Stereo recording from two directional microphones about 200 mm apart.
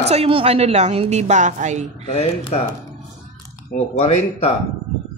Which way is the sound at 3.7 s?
30° left (ahead or behind).